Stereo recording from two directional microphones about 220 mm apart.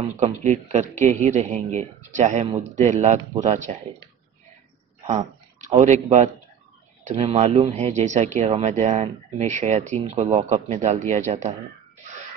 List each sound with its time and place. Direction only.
0.0 s speech: 30° right (ahead or behind)
5.0 s a sound: 30° right (ahead or behind)
6.0 s speech: 30° right (ahead or behind)